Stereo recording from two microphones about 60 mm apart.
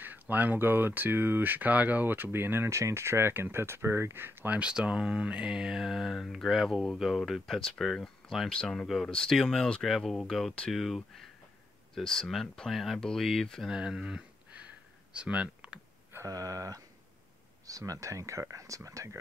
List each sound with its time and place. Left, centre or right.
0.0 s speech: right
2.7 s speech: right
4.5 s speech: centre
13.7 s speech: centre
16.3 s a sound: right
17.6 s speech: right